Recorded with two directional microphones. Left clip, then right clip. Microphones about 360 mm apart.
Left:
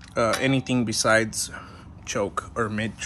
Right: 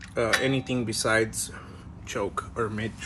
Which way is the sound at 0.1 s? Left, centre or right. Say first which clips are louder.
Left 2 dB; centre.